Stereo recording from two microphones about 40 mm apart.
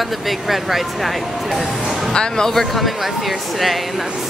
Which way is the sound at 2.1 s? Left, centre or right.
Left.